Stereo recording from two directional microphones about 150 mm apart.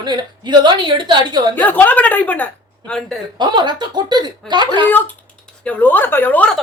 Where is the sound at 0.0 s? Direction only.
30° right (ahead or behind).